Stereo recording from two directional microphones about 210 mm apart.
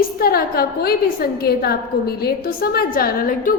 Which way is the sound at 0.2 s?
45° left (ahead or behind).